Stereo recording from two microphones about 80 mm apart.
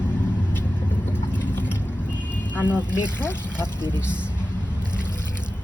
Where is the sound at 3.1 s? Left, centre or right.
Left.